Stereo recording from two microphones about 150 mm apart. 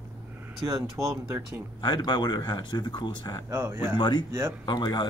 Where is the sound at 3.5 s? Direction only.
15° right (ahead or behind).